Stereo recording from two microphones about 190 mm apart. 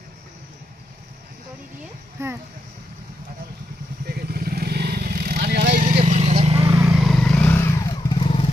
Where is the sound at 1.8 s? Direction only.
15° right (ahead or behind).